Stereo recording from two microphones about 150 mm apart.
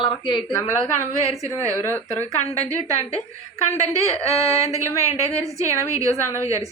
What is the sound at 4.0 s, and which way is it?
A woman's voice, 20° right (ahead or behind).